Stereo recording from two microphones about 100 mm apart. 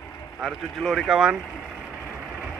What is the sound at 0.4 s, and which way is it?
Speech, centre (ahead or behind).